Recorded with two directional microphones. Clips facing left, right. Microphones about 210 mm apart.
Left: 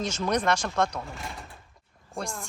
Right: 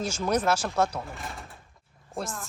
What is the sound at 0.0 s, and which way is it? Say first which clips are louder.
Speech: right 1 dB; 5° right (ahead or behind).